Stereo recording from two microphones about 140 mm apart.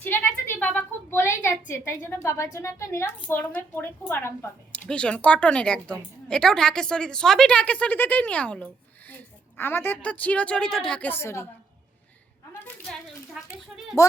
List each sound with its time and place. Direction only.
0.0 s a woman's voice: 15° left (ahead or behind)
12.5 s a sound: 10° left (ahead or behind)
13.4 s a child's voice: 5° right (ahead or behind)